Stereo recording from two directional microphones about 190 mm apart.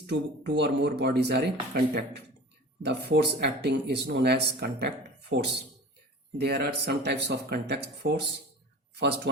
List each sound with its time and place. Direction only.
0.0 s speech: 65° right (ahead or behind)
2.8 s speech: 65° right (ahead or behind)
5.3 s speech: 70° right (ahead or behind)
6.3 s speech: 60° right (ahead or behind)